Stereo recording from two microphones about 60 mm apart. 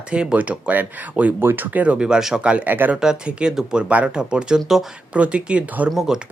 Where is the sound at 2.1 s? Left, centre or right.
Centre.